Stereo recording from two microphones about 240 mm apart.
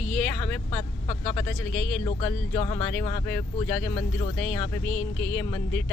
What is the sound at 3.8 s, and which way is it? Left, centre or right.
Speech, centre.